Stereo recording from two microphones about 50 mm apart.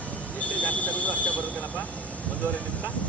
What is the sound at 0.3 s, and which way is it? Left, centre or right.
Vehicle, left.